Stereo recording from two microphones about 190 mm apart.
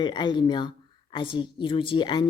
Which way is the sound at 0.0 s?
25° left (ahead or behind).